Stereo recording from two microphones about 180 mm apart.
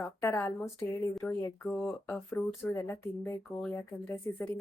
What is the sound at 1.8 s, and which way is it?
A woman's voice, 5° left (ahead or behind).